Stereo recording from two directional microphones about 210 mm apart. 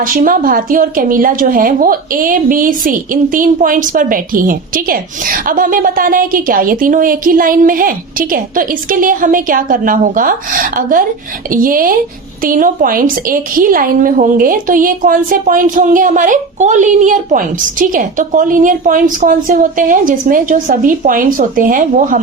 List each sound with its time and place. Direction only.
0.0 s a woman's voice: 40° right (ahead or behind)